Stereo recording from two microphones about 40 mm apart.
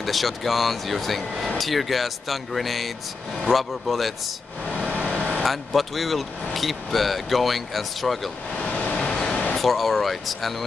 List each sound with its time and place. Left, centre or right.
0.0 s speech: centre
4.6 s vehicle: left
5.4 s speech: centre
8.5 s vehicle: left
8.9 s vehicle: left
9.6 s speech: centre